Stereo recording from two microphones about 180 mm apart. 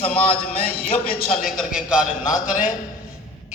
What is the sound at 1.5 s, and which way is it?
A man's voice, centre (ahead or behind).